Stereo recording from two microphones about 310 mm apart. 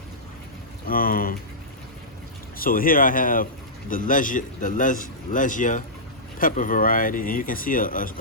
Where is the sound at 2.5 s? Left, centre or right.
Left.